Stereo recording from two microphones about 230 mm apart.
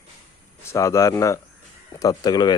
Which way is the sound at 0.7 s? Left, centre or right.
Centre.